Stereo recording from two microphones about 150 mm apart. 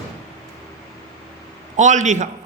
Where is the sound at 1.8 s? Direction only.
55° right (ahead or behind).